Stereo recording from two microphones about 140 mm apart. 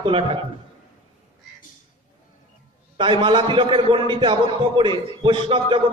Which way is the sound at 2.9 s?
35° right (ahead or behind).